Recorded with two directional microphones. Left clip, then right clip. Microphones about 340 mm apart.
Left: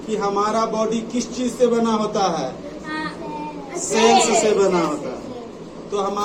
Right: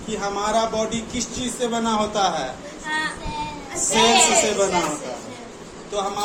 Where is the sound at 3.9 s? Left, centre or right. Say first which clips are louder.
Left 2 dB; centre.